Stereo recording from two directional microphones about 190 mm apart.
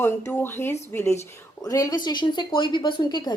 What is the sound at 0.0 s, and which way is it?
Speech, 10° left (ahead or behind).